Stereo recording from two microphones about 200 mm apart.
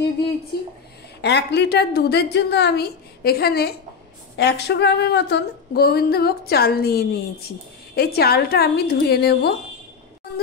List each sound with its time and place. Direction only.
1.2 s a woman's voice: 60° left (ahead or behind)